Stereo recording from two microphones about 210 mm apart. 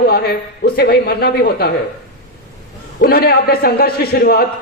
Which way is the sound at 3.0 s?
45° left (ahead or behind).